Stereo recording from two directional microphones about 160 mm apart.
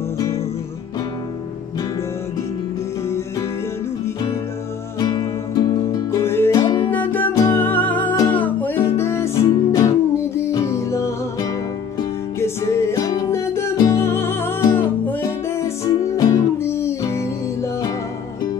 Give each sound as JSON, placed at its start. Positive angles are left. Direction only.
{"t": 4.9, "sound": "music", "side_deg": 25}
{"t": 6.9, "sound": "music", "side_deg": 10}